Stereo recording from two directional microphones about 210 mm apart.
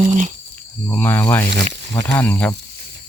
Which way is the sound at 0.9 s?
10° left (ahead or behind).